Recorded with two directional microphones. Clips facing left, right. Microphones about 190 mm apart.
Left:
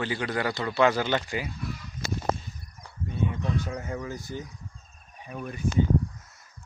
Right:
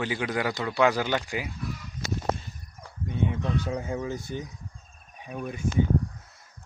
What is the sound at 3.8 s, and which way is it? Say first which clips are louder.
Speech: right 3 dB; 15° right (ahead or behind).